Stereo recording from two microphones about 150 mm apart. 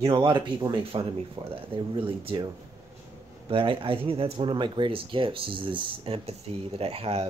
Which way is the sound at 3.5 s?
35° right (ahead or behind).